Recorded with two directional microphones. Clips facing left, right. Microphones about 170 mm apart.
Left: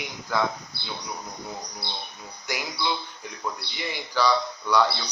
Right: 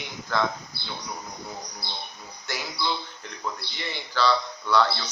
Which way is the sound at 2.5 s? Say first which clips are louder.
Left 1 dB; 15° left (ahead or behind).